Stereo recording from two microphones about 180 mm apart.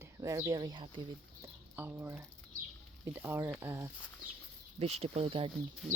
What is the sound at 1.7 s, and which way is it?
Speech, 10° right (ahead or behind).